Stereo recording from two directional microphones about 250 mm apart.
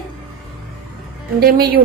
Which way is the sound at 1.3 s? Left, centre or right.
Right.